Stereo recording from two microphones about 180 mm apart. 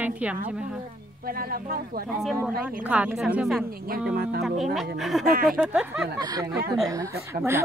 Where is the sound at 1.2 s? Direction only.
55° right (ahead or behind).